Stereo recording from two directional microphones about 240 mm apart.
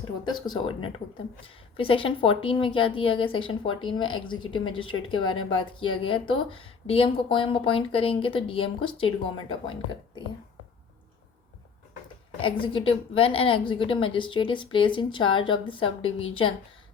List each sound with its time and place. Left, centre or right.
0.3 s speech: centre
12.4 s speech: left